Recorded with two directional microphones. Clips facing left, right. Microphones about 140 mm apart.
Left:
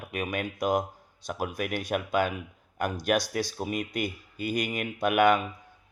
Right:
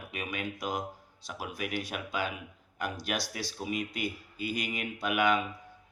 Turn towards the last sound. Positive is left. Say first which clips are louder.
# left 6 dB
turn(degrees=50)  # may be behind; listen again after turning